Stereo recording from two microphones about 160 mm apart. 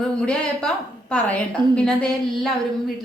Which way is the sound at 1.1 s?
5° left (ahead or behind).